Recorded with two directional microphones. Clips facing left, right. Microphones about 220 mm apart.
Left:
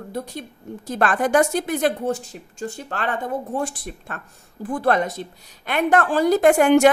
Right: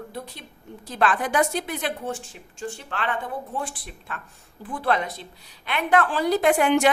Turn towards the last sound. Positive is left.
turn(degrees=45)  # may be behind; listen again after turning